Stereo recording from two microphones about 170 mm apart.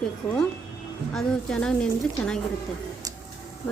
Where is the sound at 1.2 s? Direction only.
5° left (ahead or behind).